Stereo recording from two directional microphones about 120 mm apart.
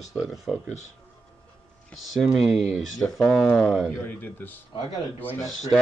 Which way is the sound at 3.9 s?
20° left (ahead or behind).